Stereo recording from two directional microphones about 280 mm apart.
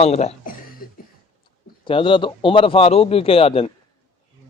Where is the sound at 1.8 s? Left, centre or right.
Centre.